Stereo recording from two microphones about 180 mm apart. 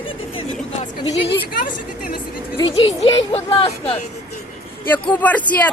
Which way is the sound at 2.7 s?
30° left (ahead or behind).